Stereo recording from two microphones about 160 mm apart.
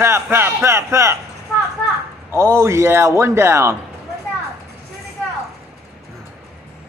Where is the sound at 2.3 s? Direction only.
15° right (ahead or behind).